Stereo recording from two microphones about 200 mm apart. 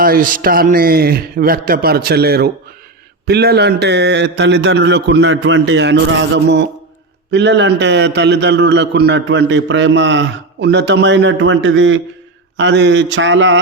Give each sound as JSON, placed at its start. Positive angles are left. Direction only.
{"t": 0.0, "sound": "a man's voice", "side_deg": -45}